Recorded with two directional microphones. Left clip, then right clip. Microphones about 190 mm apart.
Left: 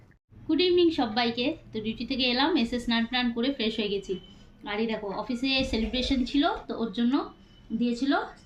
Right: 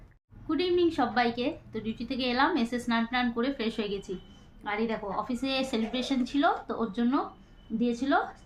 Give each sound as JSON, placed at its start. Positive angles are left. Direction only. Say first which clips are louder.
{"t": 0.4, "sound": "a woman's voice", "louder": "left 4 dB", "side_deg": -15}